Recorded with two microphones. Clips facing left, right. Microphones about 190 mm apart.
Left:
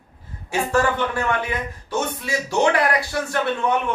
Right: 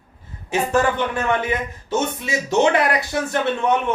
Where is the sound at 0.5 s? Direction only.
20° right (ahead or behind).